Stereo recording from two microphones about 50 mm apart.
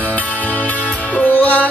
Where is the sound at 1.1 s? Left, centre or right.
Left.